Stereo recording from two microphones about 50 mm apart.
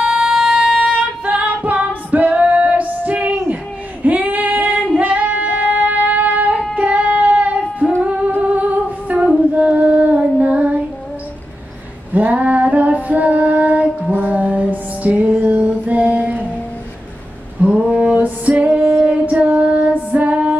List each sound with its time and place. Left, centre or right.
0.0 s music: centre
1.4 s female singing: right
8.4 s humming: right
9.5 s female singing: right
12.1 s female singing: right
14.1 s music: right
17.6 s a sound: right
18.6 s female singing: right